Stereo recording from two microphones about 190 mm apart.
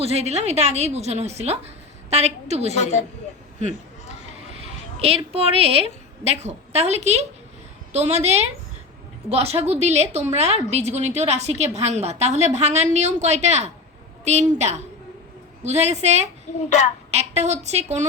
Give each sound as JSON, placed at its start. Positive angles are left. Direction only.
{"t": 0.0, "sound": "a woman's voice", "side_deg": -35}
{"t": 2.7, "sound": "speech", "side_deg": 40}
{"t": 4.6, "sound": "a woman's voice", "side_deg": -30}